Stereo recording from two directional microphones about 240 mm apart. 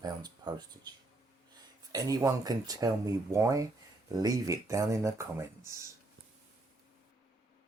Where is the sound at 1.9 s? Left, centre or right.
Centre.